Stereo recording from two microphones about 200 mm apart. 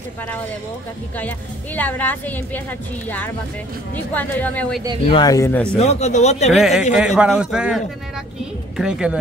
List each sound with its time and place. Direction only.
1.8 s a woman's voice: 10° left (ahead or behind)
3.9 s a woman's voice: 10° left (ahead or behind)
5.1 s a woman's voice: 20° left (ahead or behind)
5.8 s speech: 35° left (ahead or behind)
6.5 s a man's voice: centre (ahead or behind)